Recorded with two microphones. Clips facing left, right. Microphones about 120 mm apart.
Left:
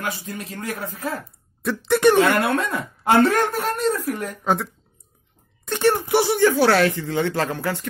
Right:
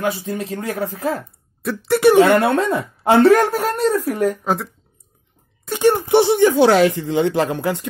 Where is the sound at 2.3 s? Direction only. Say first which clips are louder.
Right 5 dB; 30° right (ahead or behind).